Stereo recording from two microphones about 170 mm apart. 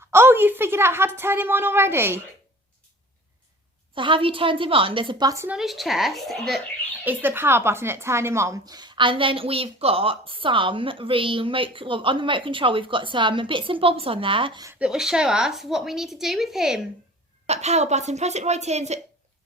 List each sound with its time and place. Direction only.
0.1 s a woman's voice: 15° right (ahead or behind)
3.9 s a woman's voice: 30° right (ahead or behind)
5.5 s a woman's voice: centre (ahead or behind)
7.0 s a woman's voice: 10° right (ahead or behind); by 14.7 s 30° right (ahead or behind)
14.7 s a woman's voice: 5° right (ahead or behind)
17.4 s a woman's voice: 40° right (ahead or behind)